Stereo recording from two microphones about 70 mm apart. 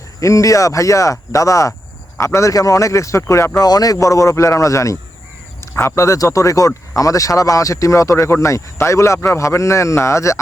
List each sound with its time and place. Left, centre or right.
0.2 s speech: left
3.6 s speech: left
3.9 s speech: left
5.5 s a sound: left
6.0 s speech: left